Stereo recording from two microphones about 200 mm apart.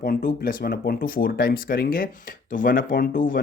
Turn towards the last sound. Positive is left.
turn(degrees=45)  # may be behind; listen again after turning